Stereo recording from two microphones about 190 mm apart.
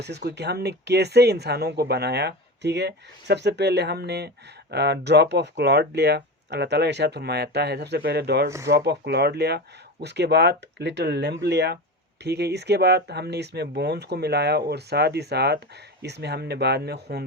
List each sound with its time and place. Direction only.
0.3 s speech: 60° right (ahead or behind)
8.4 s speech: 15° right (ahead or behind)
8.7 s speech: 60° right (ahead or behind)